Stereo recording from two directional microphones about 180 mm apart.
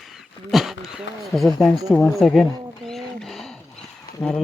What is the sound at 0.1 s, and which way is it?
Speech, centre (ahead or behind).